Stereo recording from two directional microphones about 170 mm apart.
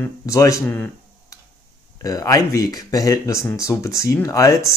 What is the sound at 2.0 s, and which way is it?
Speech, 20° left (ahead or behind).